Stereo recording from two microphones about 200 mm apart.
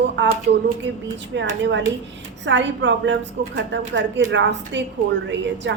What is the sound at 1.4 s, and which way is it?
A woman's voice, 65° right (ahead or behind).